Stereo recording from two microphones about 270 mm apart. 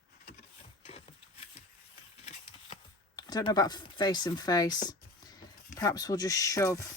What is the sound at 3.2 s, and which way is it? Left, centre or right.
Speech, centre.